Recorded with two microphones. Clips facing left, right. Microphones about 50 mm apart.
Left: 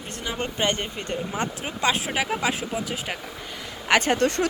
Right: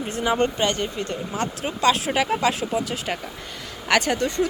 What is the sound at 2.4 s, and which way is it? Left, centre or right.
Speech, centre.